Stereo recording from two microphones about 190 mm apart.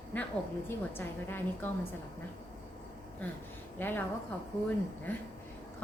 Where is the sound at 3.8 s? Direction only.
10° left (ahead or behind).